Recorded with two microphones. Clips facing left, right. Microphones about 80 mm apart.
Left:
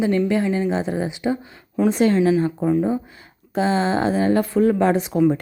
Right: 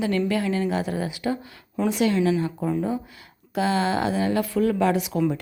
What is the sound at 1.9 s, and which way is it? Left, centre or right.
Speech, left.